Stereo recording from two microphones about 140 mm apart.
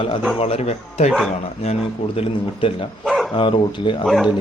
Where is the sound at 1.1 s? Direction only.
Centre (ahead or behind).